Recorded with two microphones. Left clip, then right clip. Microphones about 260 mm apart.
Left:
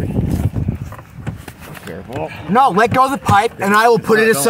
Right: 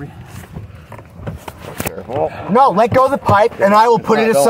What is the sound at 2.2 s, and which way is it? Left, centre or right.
Speech, left.